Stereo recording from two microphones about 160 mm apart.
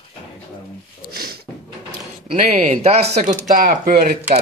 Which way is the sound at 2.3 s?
45° right (ahead or behind).